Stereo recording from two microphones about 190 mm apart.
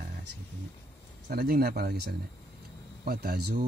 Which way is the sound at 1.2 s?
55° right (ahead or behind).